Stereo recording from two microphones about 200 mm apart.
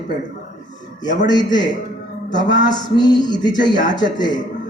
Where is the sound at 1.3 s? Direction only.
20° left (ahead or behind).